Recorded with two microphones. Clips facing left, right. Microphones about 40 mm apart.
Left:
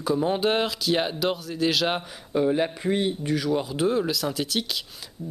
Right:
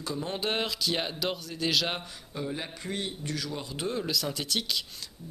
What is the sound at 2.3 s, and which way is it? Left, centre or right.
Mantra, left.